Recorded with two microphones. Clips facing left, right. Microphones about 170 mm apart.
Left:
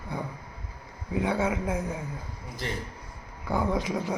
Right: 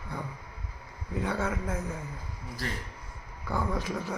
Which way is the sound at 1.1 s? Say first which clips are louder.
Left 4 dB; 15° left (ahead or behind).